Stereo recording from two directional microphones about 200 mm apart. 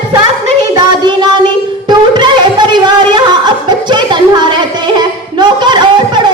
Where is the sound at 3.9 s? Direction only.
25° right (ahead or behind).